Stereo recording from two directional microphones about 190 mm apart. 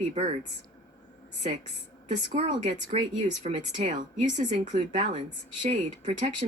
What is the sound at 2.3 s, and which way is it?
Speech, 40° right (ahead or behind).